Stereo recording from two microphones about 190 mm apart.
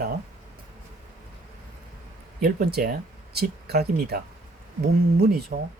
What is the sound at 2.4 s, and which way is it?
Speech, 55° right (ahead or behind).